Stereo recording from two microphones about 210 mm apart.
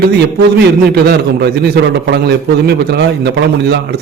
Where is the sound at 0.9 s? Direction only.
50° right (ahead or behind).